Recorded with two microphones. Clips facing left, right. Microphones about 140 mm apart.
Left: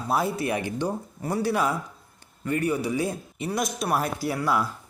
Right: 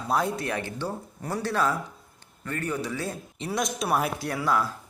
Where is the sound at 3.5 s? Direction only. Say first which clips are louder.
Even; centre (ahead or behind).